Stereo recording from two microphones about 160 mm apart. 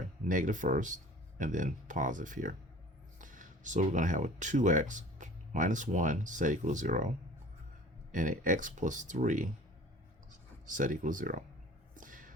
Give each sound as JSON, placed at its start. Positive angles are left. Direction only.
{"t": 0.3, "sound": "speech", "side_deg": -55}
{"t": 8.1, "sound": "speech", "side_deg": -55}
{"t": 10.7, "sound": "speech", "side_deg": -55}
{"t": 11.9, "sound": "music", "side_deg": -55}